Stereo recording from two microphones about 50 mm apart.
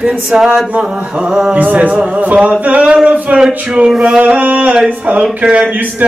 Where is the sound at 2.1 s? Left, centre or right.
Right.